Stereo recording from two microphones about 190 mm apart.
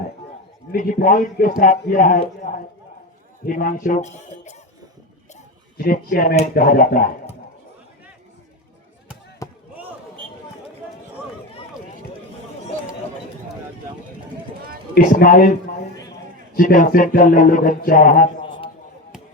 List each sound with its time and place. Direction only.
0.7 s speech: 50° left (ahead or behind)
3.4 s speech: 45° left (ahead or behind)
5.7 s speech: 50° left (ahead or behind)
9.4 s basketball bounce: 15° left (ahead or behind)
14.9 s speech: 45° left (ahead or behind)
16.6 s speech: 45° left (ahead or behind)